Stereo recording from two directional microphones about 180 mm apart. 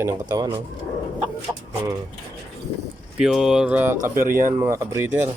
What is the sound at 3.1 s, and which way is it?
Speech, 5° right (ahead or behind).